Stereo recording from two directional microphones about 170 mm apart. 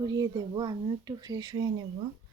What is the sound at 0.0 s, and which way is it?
Speech, 25° right (ahead or behind).